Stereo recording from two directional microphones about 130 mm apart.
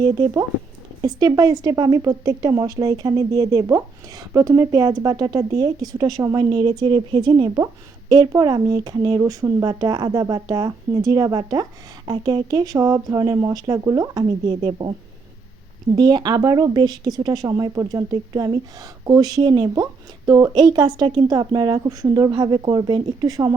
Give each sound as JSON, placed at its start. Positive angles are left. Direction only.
{"t": 1.0, "sound": "a woman's voice", "side_deg": -30}
{"t": 6.4, "sound": "a woman's voice", "side_deg": -40}
{"t": 14.6, "sound": "speech", "side_deg": -40}
{"t": 16.0, "sound": "a woman's voice", "side_deg": -30}